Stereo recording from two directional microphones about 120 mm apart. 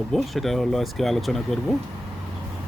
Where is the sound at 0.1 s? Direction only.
Centre (ahead or behind).